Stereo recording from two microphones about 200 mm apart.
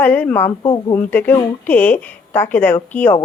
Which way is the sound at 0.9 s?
10° left (ahead or behind).